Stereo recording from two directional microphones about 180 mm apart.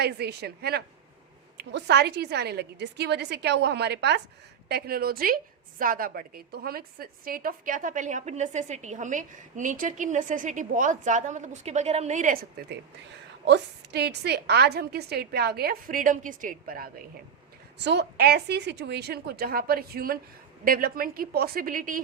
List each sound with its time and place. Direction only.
0.0 s a woman's voice: 65° right (ahead or behind)
4.7 s a woman's voice: 55° right (ahead or behind)
13.4 s a woman's voice: 70° right (ahead or behind); by 16.9 s 55° right (ahead or behind)
17.8 s a woman's voice: 65° right (ahead or behind); by 22.0 s 50° right (ahead or behind)